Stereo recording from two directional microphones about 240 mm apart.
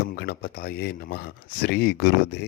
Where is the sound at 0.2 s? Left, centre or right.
Left.